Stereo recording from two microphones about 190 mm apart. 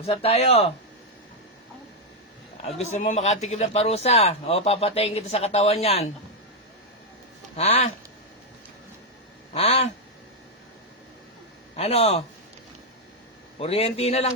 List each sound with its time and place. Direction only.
0.0 s a man's voice: 30° left (ahead or behind)
2.6 s a man's voice: 35° left (ahead or behind)
7.5 s a man's voice: 35° left (ahead or behind)
9.5 s a man's voice: 30° left (ahead or behind)
11.8 s a man's voice: 35° left (ahead or behind)
13.6 s a man's voice: 30° left (ahead or behind)